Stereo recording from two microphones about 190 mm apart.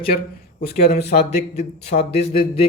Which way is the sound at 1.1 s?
35° left (ahead or behind).